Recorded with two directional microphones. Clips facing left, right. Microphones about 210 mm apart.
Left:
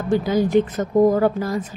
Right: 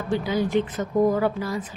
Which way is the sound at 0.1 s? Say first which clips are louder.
Left 5 dB; 45° left (ahead or behind).